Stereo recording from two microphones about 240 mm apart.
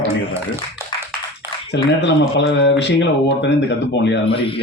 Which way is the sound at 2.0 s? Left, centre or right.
Left.